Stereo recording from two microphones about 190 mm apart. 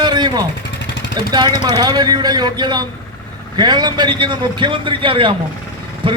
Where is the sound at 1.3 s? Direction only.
20° right (ahead or behind).